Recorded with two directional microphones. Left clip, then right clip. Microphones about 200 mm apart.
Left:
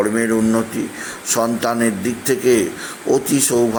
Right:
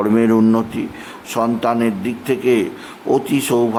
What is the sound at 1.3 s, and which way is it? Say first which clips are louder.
A man's voice: right 1 dB; centre (ahead or behind).